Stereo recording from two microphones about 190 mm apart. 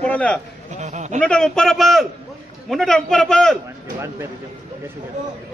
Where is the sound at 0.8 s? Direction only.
35° right (ahead or behind).